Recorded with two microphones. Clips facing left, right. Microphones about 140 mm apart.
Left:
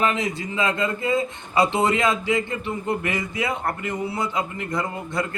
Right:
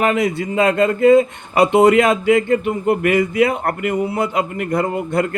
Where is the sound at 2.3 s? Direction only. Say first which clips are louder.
Right 9 dB; 60° right (ahead or behind).